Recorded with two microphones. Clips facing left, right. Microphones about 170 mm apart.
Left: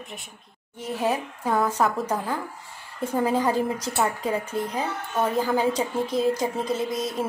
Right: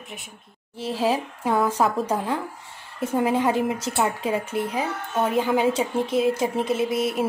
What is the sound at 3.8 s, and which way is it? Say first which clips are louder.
Speech: right 1 dB; 20° right (ahead or behind).